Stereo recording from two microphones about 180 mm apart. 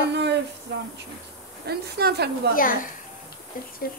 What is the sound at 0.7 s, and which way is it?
Speech, 80° right.